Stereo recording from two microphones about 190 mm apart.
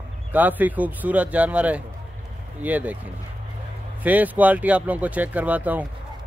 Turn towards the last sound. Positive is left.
turn(degrees=-10)  # may be behind; listen again after turning